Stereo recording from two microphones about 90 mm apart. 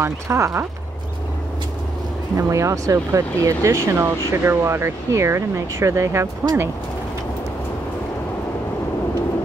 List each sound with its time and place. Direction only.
0.0 s speech: 35° right (ahead or behind)
2.3 s speech: 35° right (ahead or behind)